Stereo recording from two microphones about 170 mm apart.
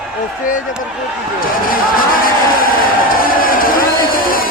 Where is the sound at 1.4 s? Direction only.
55° left (ahead or behind).